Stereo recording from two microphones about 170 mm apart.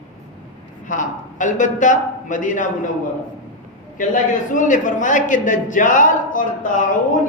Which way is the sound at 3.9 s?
50° left (ahead or behind).